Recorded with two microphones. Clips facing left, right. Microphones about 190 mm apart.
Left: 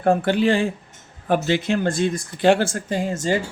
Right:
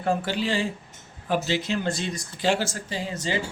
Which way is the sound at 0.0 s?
55° left (ahead or behind).